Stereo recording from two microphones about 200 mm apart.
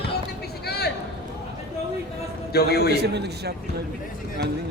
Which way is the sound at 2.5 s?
50° left (ahead or behind).